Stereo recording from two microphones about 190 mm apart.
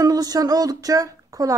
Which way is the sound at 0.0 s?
20° right (ahead or behind).